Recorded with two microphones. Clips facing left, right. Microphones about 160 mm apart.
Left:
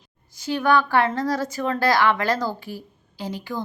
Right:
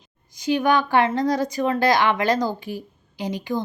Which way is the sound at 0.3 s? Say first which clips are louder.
Right 1 dB; 15° right (ahead or behind).